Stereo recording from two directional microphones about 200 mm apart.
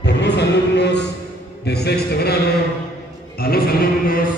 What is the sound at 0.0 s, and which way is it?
Chant, 60° left (ahead or behind).